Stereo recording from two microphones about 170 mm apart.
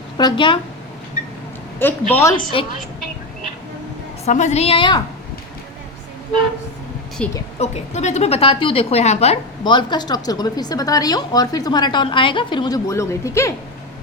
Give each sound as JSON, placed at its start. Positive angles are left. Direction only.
{"t": 0.2, "sound": "a woman's voice", "side_deg": 25}
{"t": 1.8, "sound": "a woman's voice", "side_deg": 10}
{"t": 4.3, "sound": "a woman's voice", "side_deg": 45}
{"t": 7.2, "sound": "a woman's voice", "side_deg": 5}
{"t": 7.6, "sound": "a woman's voice", "side_deg": 40}